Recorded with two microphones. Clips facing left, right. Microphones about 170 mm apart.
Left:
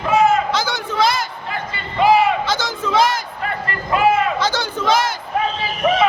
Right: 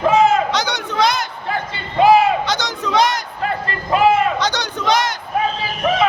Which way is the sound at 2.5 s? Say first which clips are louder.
Even; 5° left (ahead or behind).